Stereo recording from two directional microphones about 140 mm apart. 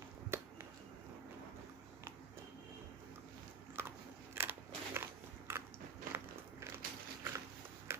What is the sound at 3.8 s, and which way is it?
Biting, 15° right (ahead or behind).